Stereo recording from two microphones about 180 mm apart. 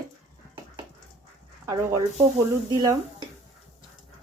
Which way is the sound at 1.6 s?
20° right (ahead or behind).